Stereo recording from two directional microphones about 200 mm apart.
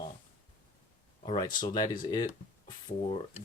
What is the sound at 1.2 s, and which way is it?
Speech, 25° left (ahead or behind).